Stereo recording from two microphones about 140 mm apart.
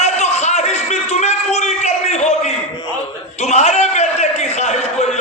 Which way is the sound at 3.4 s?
55° left (ahead or behind).